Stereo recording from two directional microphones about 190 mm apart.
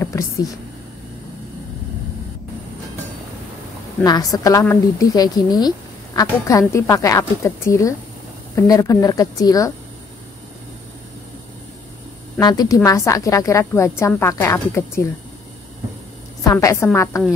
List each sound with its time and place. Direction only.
4.0 s a woman's voice: 20° left (ahead or behind)
12.4 s a woman's voice: 20° left (ahead or behind)
16.4 s a woman's voice: 15° left (ahead or behind)